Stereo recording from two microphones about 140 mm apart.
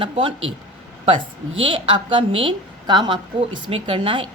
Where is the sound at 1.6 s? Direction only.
35° right (ahead or behind).